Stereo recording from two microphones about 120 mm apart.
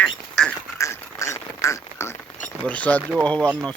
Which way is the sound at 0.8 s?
25° left (ahead or behind).